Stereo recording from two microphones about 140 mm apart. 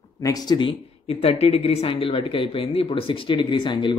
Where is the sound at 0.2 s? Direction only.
25° left (ahead or behind).